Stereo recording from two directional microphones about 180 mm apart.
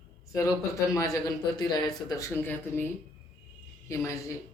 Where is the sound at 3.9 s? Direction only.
15° left (ahead or behind).